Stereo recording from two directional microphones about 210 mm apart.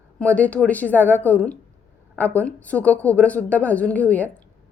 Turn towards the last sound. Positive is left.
turn(degrees=5)  # may be behind; listen again after turning